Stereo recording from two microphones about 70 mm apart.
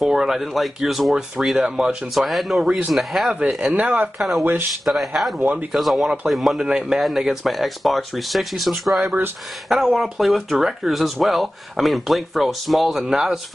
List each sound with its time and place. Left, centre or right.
0.0 s speech: centre
3.7 s speech: right
4.2 s speech: centre